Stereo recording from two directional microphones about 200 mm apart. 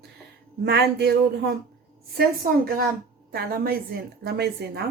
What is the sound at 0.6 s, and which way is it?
Speech, 55° right (ahead or behind).